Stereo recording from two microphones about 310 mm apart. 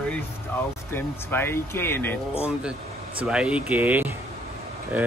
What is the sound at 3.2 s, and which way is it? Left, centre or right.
Speech, centre.